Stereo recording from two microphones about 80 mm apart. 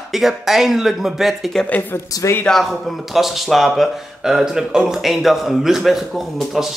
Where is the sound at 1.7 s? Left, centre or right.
Left.